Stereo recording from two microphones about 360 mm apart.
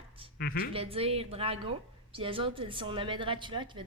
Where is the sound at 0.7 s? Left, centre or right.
Centre.